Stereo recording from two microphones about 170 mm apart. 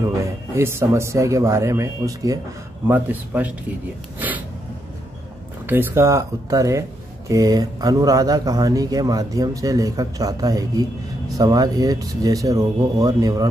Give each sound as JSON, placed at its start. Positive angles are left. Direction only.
{"t": 0.0, "sound": "speech", "side_deg": -15}
{"t": 5.7, "sound": "speech", "side_deg": -15}